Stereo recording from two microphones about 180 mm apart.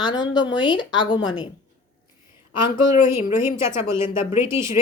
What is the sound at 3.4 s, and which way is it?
Speech, 15° right (ahead or behind).